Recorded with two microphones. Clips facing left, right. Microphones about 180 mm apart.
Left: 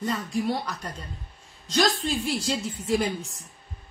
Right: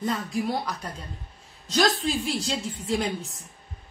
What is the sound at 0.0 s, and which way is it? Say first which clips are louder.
A woman's voice: even; centre (ahead or behind).